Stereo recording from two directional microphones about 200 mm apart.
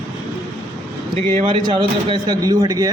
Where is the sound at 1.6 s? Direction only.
25° right (ahead or behind).